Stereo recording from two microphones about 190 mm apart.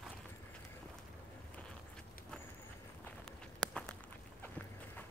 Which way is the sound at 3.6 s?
5° left (ahead or behind).